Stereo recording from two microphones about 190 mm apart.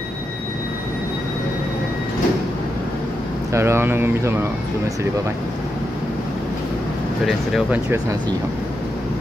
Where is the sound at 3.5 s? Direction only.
15° right (ahead or behind).